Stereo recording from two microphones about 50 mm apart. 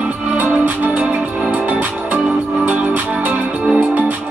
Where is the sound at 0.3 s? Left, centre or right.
Right.